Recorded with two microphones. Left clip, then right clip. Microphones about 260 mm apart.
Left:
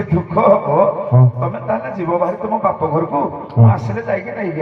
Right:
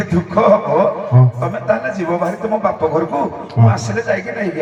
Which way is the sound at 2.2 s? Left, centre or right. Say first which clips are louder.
Left 1 dB; right.